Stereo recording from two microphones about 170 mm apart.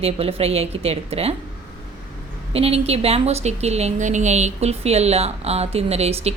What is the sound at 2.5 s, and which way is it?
A woman's voice, 35° right (ahead or behind).